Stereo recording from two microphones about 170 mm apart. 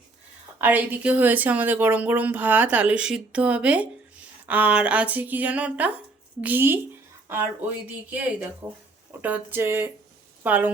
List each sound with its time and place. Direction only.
0.6 s speech: 10° right (ahead or behind)